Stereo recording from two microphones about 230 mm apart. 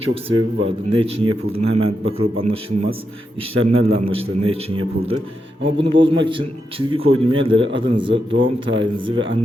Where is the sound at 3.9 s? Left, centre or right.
Right.